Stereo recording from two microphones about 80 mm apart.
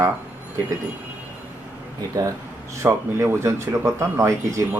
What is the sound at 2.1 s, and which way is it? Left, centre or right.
Speech, right.